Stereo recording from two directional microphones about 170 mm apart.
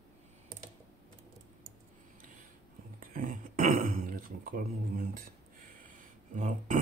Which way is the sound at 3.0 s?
55° right (ahead or behind).